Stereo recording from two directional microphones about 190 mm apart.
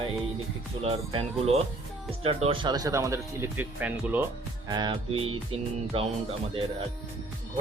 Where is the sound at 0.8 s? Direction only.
30° right (ahead or behind).